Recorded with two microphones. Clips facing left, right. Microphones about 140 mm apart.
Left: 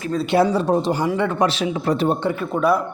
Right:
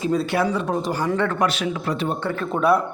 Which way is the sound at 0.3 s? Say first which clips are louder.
Left 5 dB; 30° left (ahead or behind).